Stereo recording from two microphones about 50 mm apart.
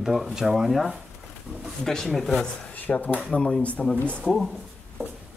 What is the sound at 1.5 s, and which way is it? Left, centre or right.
Speech, centre.